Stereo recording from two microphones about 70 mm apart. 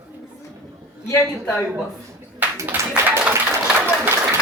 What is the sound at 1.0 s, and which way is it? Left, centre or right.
Speech, left.